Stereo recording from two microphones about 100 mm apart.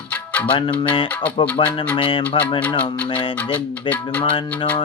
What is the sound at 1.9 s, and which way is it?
Music, 60° left (ahead or behind).